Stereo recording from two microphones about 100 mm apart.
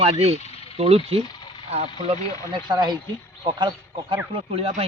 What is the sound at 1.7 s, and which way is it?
Speech, 90° right.